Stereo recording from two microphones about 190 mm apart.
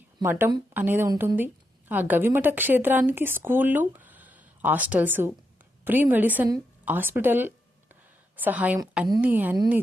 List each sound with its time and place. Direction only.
0.2 s a woman's voice: 10° right (ahead or behind)
1.1 s speech: 20° right (ahead or behind)
1.9 s a woman's voice: 10° right (ahead or behind)